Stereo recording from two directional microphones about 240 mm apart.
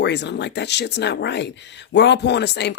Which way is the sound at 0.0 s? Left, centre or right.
Left.